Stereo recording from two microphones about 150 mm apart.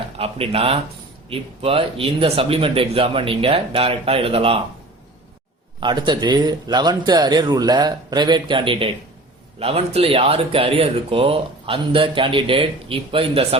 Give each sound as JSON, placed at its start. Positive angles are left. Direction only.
{"t": 0.2, "sound": "speech", "side_deg": -40}
{"t": 5.8, "sound": "speech", "side_deg": -30}